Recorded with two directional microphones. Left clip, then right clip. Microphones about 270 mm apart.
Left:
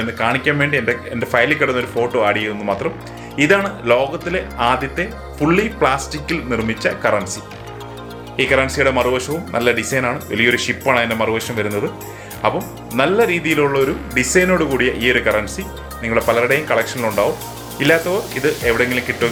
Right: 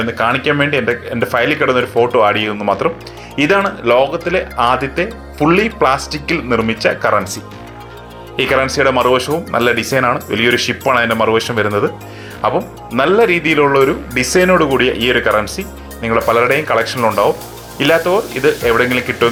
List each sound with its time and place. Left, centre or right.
0.2 s speech: centre
8.4 s speech: centre